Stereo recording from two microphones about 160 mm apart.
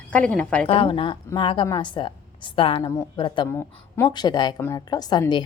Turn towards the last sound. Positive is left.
turn(degrees=25)  # may be behind; listen again after turning